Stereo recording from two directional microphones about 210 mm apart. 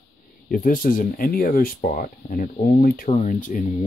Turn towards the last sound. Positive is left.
turn(degrees=40)  # may be behind; listen again after turning